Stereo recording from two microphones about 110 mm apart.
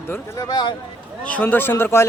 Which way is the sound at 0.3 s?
35° left (ahead or behind).